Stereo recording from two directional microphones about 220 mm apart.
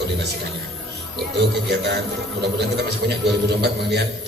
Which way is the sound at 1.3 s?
50° right (ahead or behind).